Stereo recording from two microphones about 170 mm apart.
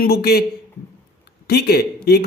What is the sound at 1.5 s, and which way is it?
Speech, 70° left (ahead or behind).